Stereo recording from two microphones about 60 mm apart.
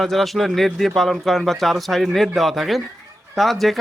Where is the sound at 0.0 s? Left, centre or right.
Centre.